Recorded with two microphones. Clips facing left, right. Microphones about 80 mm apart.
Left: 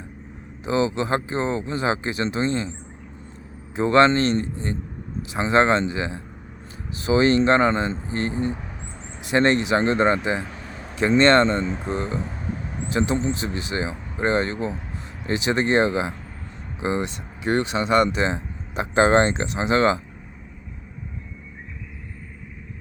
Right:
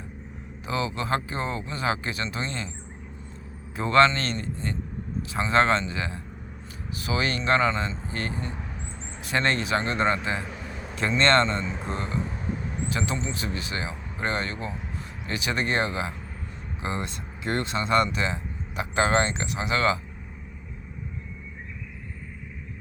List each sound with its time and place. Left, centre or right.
0.6 s speech: left
3.8 s speech: left